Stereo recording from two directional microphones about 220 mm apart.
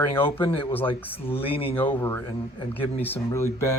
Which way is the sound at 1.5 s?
25° left (ahead or behind).